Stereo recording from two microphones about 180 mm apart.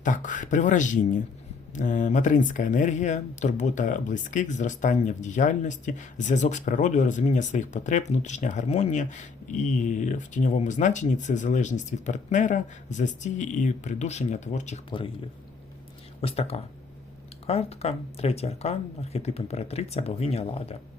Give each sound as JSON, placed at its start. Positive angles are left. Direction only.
{"t": 0.0, "sound": "speech", "side_deg": 45}
{"t": 16.2, "sound": "speech", "side_deg": 35}